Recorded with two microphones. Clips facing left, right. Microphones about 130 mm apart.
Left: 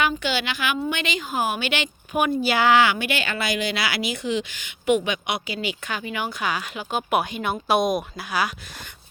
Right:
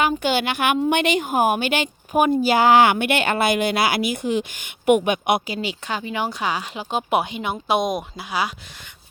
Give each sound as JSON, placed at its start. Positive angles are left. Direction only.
{"t": 0.0, "sound": "a woman's voice", "side_deg": -50}
{"t": 5.5, "sound": "speech", "side_deg": -30}